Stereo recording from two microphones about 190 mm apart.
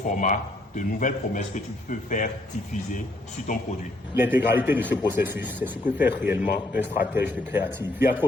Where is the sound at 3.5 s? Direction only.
40° left (ahead or behind).